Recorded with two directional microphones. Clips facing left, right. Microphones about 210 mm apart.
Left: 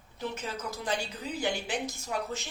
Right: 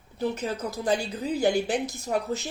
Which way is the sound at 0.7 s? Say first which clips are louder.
Right 7 dB; 35° right (ahead or behind).